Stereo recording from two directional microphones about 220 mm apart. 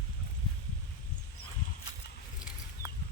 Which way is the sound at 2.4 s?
5° right (ahead or behind).